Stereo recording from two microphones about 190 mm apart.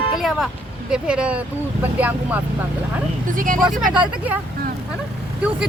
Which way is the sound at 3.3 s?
45° right (ahead or behind).